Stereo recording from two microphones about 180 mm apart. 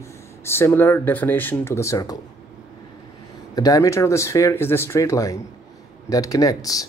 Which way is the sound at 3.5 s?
20° left (ahead or behind).